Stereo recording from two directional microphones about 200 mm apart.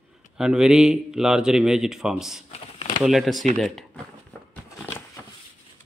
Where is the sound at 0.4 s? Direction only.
5° right (ahead or behind).